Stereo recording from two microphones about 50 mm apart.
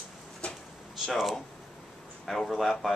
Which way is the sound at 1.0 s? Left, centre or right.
Centre.